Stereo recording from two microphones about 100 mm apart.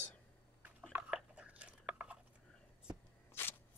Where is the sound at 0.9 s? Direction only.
10° right (ahead or behind).